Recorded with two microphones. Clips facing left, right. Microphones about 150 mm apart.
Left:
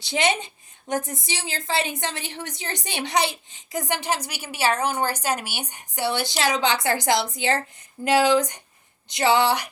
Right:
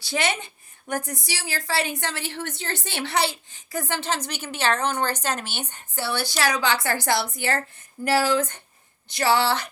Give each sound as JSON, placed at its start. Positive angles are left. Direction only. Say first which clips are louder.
{"t": 0.0, "sound": "a woman's voice", "louder": "left 3 dB", "side_deg": 20}